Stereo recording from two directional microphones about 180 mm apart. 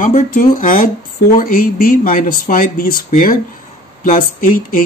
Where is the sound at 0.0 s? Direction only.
50° left (ahead or behind).